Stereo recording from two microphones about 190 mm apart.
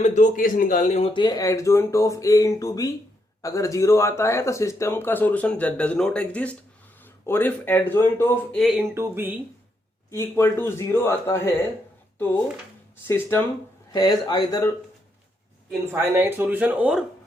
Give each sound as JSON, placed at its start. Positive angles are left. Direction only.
{"t": 0.0, "sound": "speech", "side_deg": 40}
{"t": 8.5, "sound": "speech", "side_deg": 0}
{"t": 8.8, "sound": "speech", "side_deg": -10}
{"t": 10.1, "sound": "speech", "side_deg": 15}
{"t": 13.1, "sound": "speech", "side_deg": 10}
{"t": 13.9, "sound": "speech", "side_deg": 20}
{"t": 15.9, "sound": "speech", "side_deg": -10}